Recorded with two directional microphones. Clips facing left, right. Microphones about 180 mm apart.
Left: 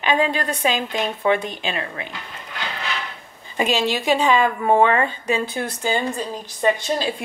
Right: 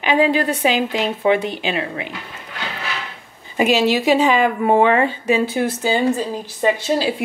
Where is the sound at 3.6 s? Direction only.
15° right (ahead or behind).